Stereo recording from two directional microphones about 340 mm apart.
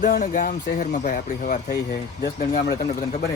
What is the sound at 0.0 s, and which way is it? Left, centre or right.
Speech, left.